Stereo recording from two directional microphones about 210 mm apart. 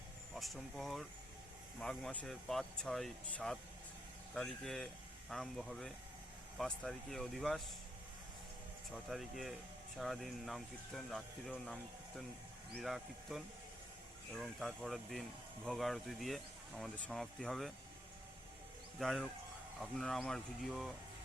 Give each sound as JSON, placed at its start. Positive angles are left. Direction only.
{"t": 0.3, "sound": "speech", "side_deg": 0}
{"t": 9.0, "sound": "speech", "side_deg": 0}
{"t": 18.9, "sound": "speech", "side_deg": 0}